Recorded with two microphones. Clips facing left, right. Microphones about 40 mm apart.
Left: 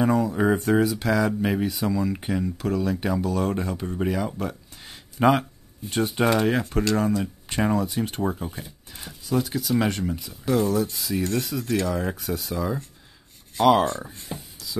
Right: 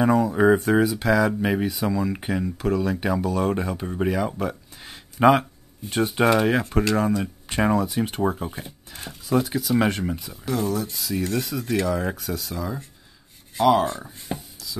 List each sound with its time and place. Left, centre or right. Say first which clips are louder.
0.0 s speech: right 3 dB; centre
14.3 s speech: right 5 dB; right